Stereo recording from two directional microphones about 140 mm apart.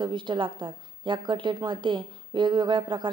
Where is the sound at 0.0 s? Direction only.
35° right (ahead or behind).